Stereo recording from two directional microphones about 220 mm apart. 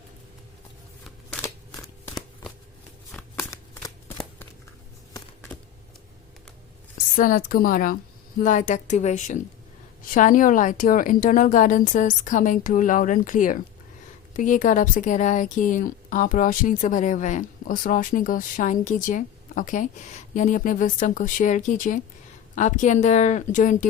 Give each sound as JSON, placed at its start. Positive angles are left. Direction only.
{"t": 3.3, "sound": "shuffling cards", "side_deg": 15}
{"t": 5.1, "sound": "a sound", "side_deg": 10}
{"t": 7.2, "sound": "speech", "side_deg": 40}